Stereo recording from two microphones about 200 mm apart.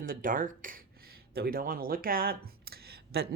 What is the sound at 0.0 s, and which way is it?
Speech, 45° right (ahead or behind).